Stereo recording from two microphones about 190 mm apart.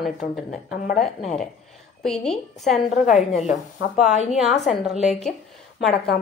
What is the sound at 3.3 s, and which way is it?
Speech, 40° left (ahead or behind).